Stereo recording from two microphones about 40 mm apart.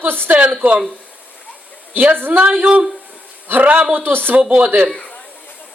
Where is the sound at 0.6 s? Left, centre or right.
Right.